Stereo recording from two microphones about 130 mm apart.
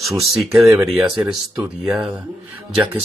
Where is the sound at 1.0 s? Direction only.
10° right (ahead or behind).